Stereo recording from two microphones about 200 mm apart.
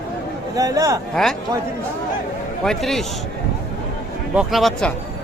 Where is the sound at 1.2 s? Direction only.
Centre (ahead or behind).